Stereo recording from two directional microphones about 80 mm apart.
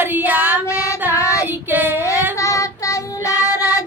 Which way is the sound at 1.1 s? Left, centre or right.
Left.